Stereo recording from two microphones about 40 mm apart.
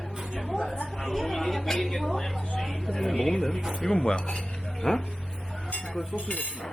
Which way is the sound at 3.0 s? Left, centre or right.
Centre.